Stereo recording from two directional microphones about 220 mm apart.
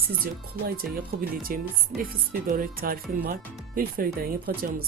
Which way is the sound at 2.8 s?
40° right (ahead or behind).